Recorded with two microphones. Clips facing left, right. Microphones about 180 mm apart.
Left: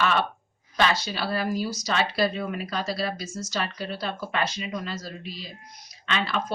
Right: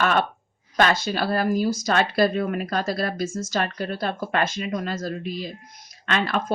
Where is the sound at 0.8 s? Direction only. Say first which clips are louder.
Right 4 dB; 50° right (ahead or behind).